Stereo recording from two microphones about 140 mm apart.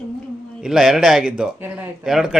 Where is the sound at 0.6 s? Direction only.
5° right (ahead or behind).